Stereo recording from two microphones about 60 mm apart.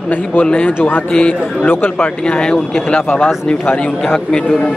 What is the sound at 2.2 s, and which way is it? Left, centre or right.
Speech, centre.